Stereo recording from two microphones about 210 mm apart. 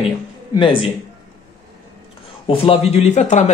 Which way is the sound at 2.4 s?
25° left (ahead or behind).